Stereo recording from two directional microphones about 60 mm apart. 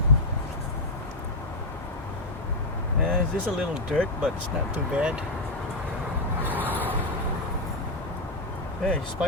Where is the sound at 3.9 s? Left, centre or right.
Left.